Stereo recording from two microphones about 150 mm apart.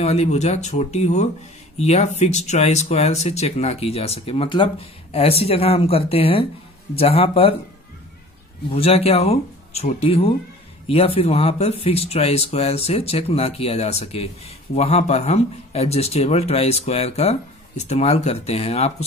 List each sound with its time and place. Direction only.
0.0 s speech: 45° left (ahead or behind)
8.6 s speech: 40° left (ahead or behind)